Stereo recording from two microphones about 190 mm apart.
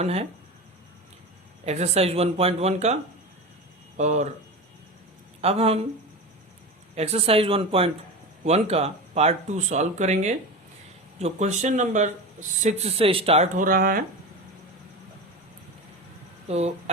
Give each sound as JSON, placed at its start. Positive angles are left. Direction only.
{"t": 0.0, "sound": "speech", "side_deg": -35}
{"t": 1.6, "sound": "speech", "side_deg": -35}
{"t": 5.4, "sound": "speech", "side_deg": -30}
{"t": 6.9, "sound": "speech", "side_deg": -35}
{"t": 16.5, "sound": "speech", "side_deg": -35}